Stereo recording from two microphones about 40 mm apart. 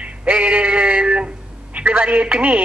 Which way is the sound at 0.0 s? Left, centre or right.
Right.